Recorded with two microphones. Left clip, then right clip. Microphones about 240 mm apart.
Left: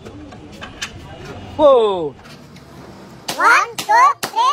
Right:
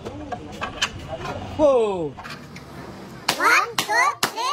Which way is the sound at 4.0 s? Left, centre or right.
Centre.